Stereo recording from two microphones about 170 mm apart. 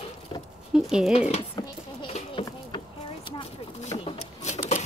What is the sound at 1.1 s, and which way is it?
Speech, 40° left (ahead or behind).